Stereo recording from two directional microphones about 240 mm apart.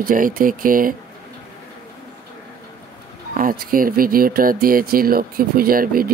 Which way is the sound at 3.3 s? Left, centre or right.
Right.